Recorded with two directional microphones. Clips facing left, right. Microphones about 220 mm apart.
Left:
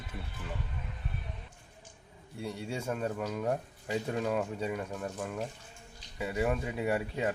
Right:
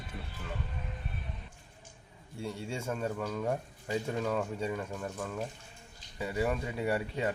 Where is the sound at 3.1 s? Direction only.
10° left (ahead or behind).